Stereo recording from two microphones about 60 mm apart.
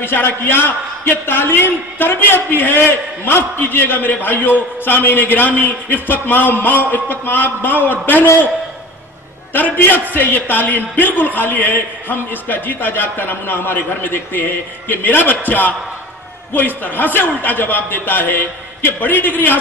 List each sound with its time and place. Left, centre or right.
0.0 s a man's voice: left
9.5 s a man's voice: left